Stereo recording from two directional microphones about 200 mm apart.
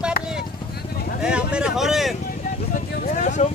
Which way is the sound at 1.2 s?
5° right (ahead or behind).